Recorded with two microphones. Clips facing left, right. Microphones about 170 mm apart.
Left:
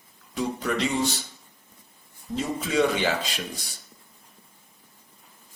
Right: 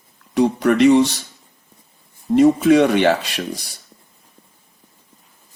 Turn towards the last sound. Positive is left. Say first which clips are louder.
# right 7 dB
turn(degrees=-70)  # may be behind; listen again after turning